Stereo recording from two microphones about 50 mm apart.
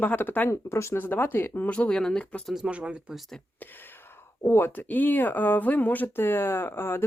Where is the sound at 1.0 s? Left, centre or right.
Left.